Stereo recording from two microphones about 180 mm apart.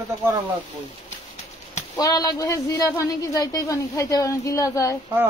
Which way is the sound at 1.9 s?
20° left (ahead or behind).